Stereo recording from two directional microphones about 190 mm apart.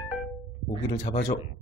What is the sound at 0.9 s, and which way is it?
Speech, 45° left (ahead or behind).